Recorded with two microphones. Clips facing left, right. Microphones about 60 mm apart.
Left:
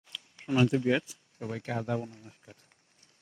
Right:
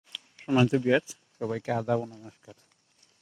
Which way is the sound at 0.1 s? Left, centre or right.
Centre.